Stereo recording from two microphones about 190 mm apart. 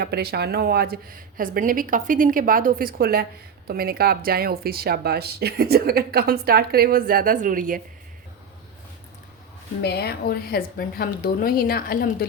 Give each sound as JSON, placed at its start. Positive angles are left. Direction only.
{"t": 0.0, "sound": "speech", "side_deg": -55}
{"t": 9.8, "sound": "a woman's voice", "side_deg": 60}